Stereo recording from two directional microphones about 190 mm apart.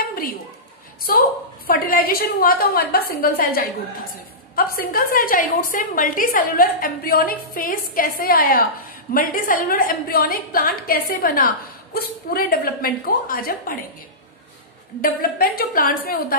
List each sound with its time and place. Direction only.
1.7 s a woman's voice: 50° left (ahead or behind)
15.0 s a woman's voice: 50° left (ahead or behind)